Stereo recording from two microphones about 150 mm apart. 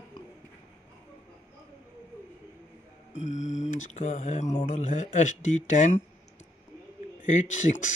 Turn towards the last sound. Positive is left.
turn(degrees=55)  # may be behind; listen again after turning